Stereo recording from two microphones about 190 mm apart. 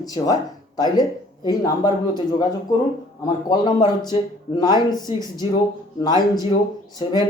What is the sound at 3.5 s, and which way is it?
Speech, 20° left (ahead or behind).